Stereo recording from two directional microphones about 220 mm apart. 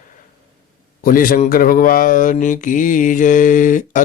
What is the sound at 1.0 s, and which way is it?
Speech, 40° left (ahead or behind).